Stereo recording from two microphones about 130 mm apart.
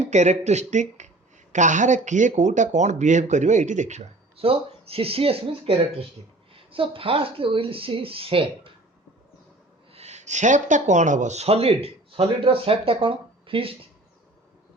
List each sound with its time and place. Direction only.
0.0 s speech: 60° right (ahead or behind); by 8.7 s 45° right (ahead or behind)
9.9 s speech: 55° right (ahead or behind)